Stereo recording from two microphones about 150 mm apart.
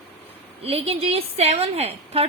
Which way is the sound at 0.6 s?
40° right (ahead or behind).